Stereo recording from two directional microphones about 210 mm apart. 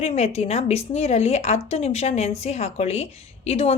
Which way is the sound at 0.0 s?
30° left (ahead or behind).